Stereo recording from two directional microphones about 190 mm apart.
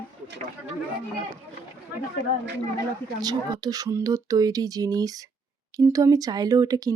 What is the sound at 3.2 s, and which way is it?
Speech, 20° right (ahead or behind).